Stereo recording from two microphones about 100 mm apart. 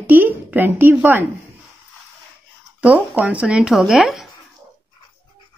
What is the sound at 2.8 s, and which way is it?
Speech, 15° right (ahead or behind).